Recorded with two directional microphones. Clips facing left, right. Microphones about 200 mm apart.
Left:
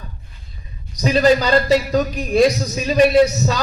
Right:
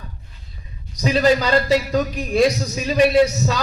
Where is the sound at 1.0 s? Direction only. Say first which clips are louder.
Left 2 dB; 40° left (ahead or behind).